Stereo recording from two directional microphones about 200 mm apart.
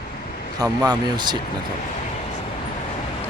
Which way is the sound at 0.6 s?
20° right (ahead or behind).